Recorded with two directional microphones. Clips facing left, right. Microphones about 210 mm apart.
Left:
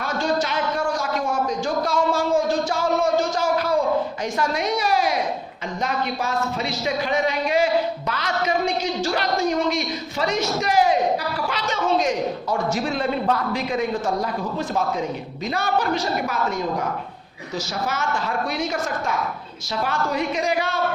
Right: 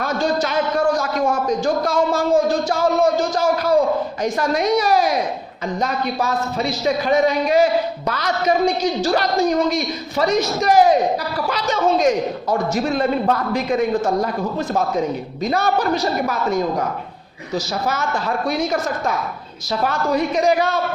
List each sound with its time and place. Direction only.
0.0 s a sound: 40° right (ahead or behind)
4.2 s a woman's voice: 40° right (ahead or behind)
15.4 s a woman's voice: 40° right (ahead or behind)
17.5 s a woman's voice: 35° right (ahead or behind)